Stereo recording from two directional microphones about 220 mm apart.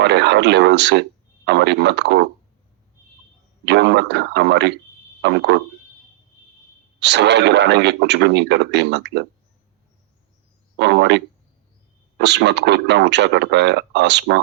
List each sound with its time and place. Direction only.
0.0 s speech: 50° right (ahead or behind)
3.7 s speech: 50° right (ahead or behind)
7.0 s speech: 50° right (ahead or behind)
10.8 s speech: 50° right (ahead or behind)
12.2 s speech: 50° right (ahead or behind)